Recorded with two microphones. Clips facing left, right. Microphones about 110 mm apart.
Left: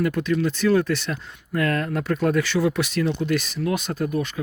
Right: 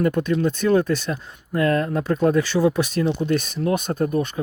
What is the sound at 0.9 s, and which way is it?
Speech, 40° right (ahead or behind).